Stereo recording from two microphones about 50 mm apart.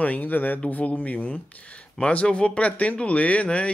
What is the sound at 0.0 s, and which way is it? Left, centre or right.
Speech, left.